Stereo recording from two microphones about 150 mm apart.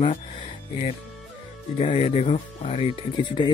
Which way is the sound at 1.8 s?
40° left (ahead or behind).